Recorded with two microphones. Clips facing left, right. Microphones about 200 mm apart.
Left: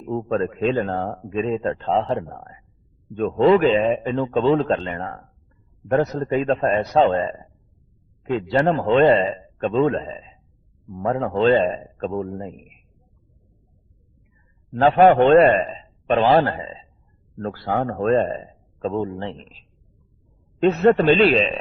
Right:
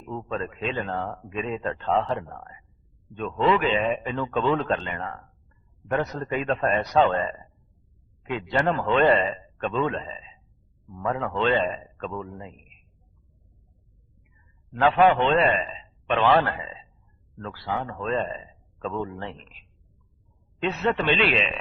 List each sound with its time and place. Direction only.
0.0 s a man's voice: 40° left (ahead or behind)
14.7 s a man's voice: 40° left (ahead or behind)
17.3 s a man's voice: 45° left (ahead or behind)